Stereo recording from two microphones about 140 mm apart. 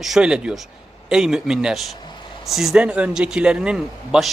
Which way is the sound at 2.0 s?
30° left (ahead or behind).